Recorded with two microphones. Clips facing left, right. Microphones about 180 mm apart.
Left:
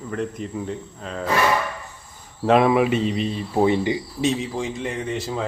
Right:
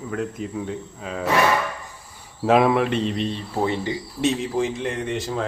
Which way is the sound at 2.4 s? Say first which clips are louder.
Left 1 dB; centre (ahead or behind).